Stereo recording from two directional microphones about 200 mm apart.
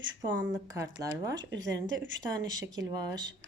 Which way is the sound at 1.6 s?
70° right (ahead or behind).